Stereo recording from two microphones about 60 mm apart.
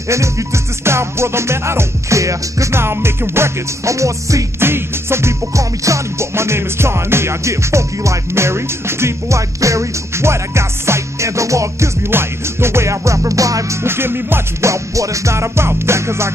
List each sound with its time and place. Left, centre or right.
0.8 s music: right
2.8 s music: right
4.6 s music: right
12.1 s music: right
13.8 s music: right
14.7 s music: right